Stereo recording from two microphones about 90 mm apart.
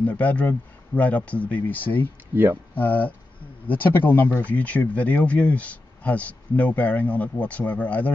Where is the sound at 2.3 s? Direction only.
25° right (ahead or behind).